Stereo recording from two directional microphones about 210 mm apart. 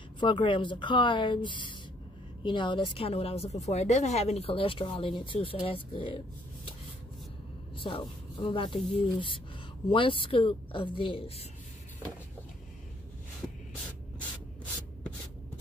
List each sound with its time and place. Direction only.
0.2 s a woman's voice: 25° left (ahead or behind)
7.7 s a woman's voice: 25° left (ahead or behind)